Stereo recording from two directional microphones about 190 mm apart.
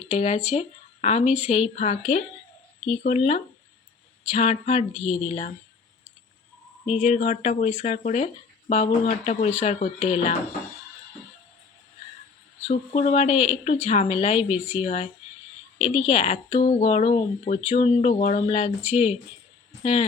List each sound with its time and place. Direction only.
0.1 s speech: 35° left (ahead or behind)
6.8 s speech: 35° left (ahead or behind)
12.6 s speech: 35° left (ahead or behind)